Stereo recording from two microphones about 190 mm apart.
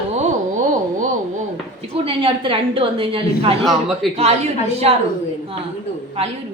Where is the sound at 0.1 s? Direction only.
40° right (ahead or behind).